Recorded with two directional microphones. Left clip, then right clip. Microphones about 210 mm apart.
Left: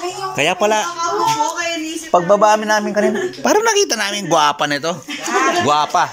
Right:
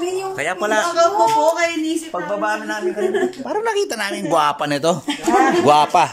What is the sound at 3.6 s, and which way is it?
Speech, 5° right (ahead or behind).